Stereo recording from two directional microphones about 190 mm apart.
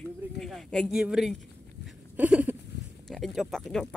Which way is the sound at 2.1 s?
10° right (ahead or behind).